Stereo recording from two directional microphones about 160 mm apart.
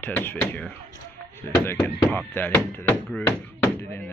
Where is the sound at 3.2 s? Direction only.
15° left (ahead or behind).